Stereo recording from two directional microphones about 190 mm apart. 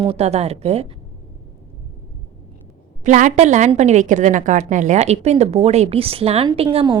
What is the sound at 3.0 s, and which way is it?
A woman's voice, 40° right (ahead or behind).